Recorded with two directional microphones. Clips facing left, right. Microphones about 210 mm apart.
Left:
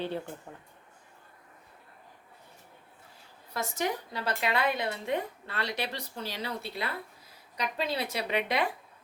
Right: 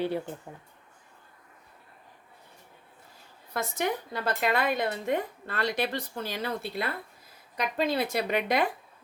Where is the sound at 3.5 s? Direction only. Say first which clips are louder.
Right 2 dB; 55° right (ahead or behind).